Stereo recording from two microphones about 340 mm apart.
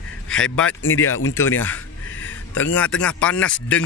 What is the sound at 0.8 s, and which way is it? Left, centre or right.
Speech, left.